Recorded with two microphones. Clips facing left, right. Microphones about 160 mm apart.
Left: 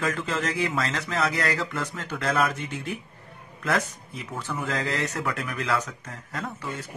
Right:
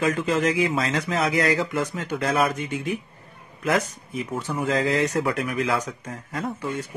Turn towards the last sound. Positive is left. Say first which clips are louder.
# right 5 dB
turn(degrees=-20)  # may be behind; listen again after turning